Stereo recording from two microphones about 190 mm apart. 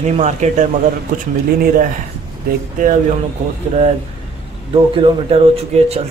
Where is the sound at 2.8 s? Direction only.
45° right (ahead or behind).